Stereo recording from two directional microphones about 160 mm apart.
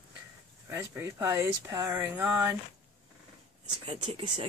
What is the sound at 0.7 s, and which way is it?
Speech, 15° right (ahead or behind).